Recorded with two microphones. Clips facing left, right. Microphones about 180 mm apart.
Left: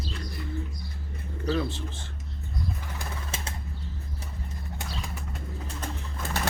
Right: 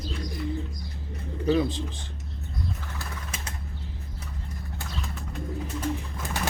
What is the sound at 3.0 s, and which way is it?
Bird, 25° left (ahead or behind).